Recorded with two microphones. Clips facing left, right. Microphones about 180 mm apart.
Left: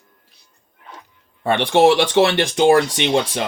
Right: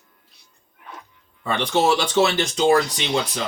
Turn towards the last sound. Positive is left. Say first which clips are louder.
# left 6 dB
turn(degrees=65)  # may be behind; listen again after turning